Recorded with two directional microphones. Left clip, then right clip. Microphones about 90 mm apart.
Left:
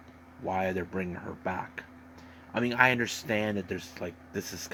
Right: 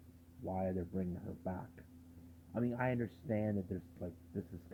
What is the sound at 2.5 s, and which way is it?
Speech, 15° left (ahead or behind).